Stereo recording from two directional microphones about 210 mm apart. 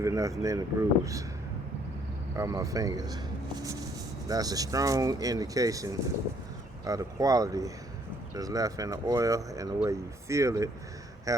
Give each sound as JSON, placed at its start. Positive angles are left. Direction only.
{"t": 0.0, "sound": "speech", "side_deg": -15}
{"t": 2.3, "sound": "speech", "side_deg": -15}